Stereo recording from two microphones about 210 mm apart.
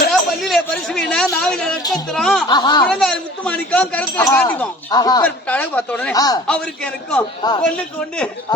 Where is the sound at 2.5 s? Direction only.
20° left (ahead or behind).